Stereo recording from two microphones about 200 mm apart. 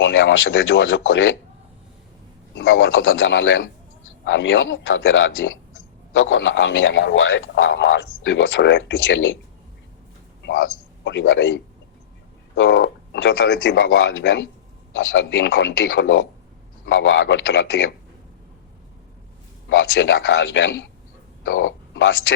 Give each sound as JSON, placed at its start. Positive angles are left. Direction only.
{"t": 0.0, "sound": "speech", "side_deg": 70}
{"t": 2.6, "sound": "speech", "side_deg": 75}
{"t": 10.6, "sound": "a man's voice", "side_deg": 65}
{"t": 19.6, "sound": "speech", "side_deg": 70}